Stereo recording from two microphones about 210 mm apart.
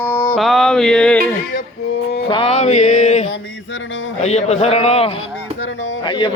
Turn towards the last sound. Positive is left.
turn(degrees=20)  # may be behind; listen again after turning